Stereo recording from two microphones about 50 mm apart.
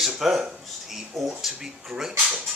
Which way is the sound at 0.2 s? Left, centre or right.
Centre.